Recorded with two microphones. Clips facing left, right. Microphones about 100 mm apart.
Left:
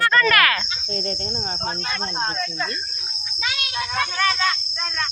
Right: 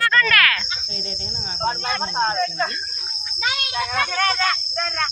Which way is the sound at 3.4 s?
40° right (ahead or behind).